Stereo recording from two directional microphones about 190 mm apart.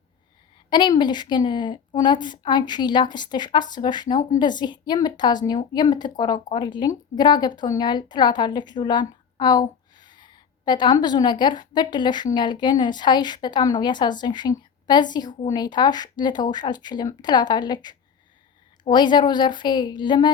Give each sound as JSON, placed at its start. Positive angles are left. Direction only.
{"t": 0.7, "sound": "a woman's voice", "side_deg": 25}